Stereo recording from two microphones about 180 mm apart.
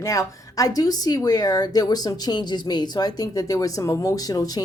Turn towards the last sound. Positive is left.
turn(degrees=20)  # may be behind; listen again after turning